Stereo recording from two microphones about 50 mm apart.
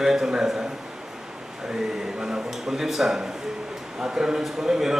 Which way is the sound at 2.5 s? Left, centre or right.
Centre.